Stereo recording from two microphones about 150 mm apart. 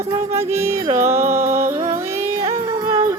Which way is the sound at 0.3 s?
15° right (ahead or behind).